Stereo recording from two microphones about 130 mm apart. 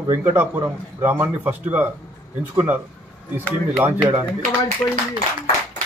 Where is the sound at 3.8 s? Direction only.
15° right (ahead or behind).